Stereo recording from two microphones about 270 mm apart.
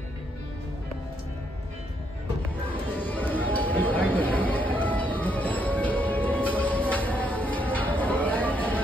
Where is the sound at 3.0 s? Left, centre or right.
Centre.